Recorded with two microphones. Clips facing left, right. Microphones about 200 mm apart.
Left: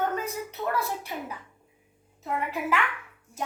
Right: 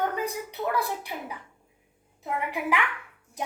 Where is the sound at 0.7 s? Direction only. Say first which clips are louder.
Right 1 dB; 15° right (ahead or behind).